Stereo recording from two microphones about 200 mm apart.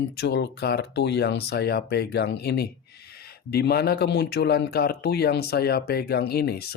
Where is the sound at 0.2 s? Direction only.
55° left (ahead or behind).